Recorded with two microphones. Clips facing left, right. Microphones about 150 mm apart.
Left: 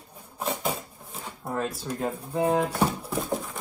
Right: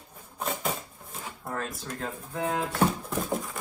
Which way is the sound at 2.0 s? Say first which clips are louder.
Left 6 dB; 15° left (ahead or behind).